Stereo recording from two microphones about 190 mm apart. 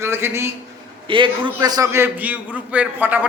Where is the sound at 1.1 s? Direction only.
25° right (ahead or behind).